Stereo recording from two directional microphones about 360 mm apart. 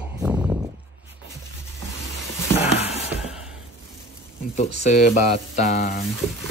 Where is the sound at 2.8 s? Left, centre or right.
Centre.